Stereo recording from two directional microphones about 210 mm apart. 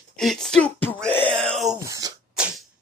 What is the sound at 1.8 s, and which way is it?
Throat clearing, 15° right (ahead or behind).